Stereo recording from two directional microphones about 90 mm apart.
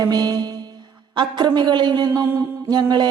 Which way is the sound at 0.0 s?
45° right (ahead or behind).